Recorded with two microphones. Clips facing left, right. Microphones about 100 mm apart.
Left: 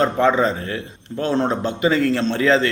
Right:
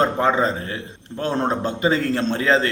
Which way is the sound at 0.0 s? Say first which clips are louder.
Left 2 dB; 30° right (ahead or behind).